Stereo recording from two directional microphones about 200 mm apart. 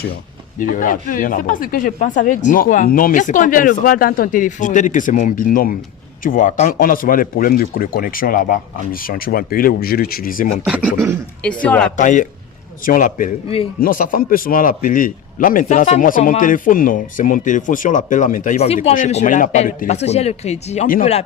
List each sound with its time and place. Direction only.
0.6 s speech: 45° left (ahead or behind)
10.6 s speech: 5° right (ahead or behind)
11.4 s speech: 5° left (ahead or behind)
11.9 s speech: 40° left (ahead or behind)